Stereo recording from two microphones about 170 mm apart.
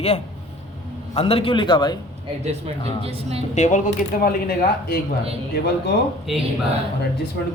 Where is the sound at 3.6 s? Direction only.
45° left (ahead or behind); by 4.9 s 65° left (ahead or behind).